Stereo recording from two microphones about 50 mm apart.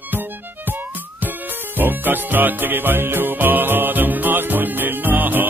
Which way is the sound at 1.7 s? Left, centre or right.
Right.